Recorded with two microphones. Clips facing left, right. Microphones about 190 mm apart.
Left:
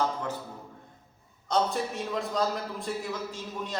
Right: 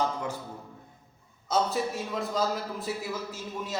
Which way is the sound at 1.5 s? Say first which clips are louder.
Even; 5° right (ahead or behind).